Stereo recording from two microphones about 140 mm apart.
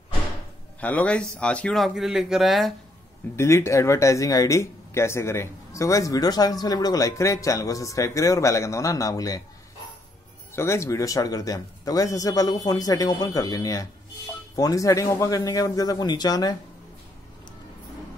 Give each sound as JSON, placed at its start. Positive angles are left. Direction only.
{"t": 0.7, "sound": "a man's voice", "side_deg": 10}
{"t": 3.3, "sound": "speech", "side_deg": 20}
{"t": 10.5, "sound": "speech", "side_deg": 20}